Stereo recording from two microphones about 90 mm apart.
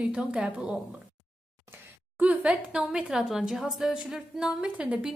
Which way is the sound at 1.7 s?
20° right (ahead or behind).